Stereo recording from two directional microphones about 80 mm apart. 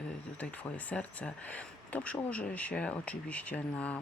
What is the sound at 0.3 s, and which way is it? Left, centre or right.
Speech, centre.